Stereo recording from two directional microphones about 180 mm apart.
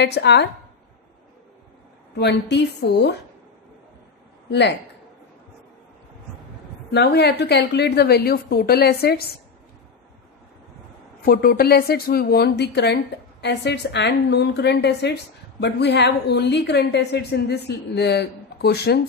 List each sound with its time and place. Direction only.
0.0 s speech: 70° left (ahead or behind)
2.1 s speech: 70° left (ahead or behind)
4.5 s speech: 70° left (ahead or behind)
6.9 s a woman's voice: 65° left (ahead or behind)
11.2 s speech: 55° left (ahead or behind)